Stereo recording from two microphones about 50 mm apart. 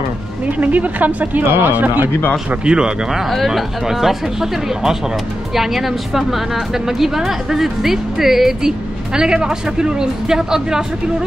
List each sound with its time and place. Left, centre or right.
0.5 s speech: right
2.6 s speech: centre
3.1 s a woman's voice: centre